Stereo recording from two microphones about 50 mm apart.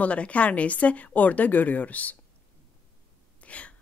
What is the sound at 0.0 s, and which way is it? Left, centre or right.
Speech, left.